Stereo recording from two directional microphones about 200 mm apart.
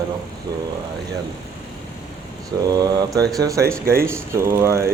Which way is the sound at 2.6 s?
20° right (ahead or behind).